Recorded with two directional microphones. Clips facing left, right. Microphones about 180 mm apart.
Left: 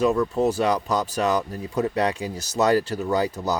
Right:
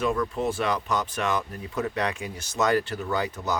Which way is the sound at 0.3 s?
40° left (ahead or behind).